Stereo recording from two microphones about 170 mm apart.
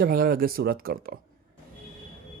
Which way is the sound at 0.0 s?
60° right (ahead or behind).